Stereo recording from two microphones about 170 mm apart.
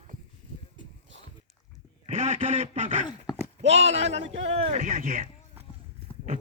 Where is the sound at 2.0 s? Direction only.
40° right (ahead or behind).